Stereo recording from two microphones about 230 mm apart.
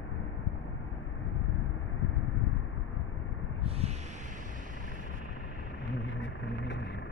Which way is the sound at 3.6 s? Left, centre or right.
Right.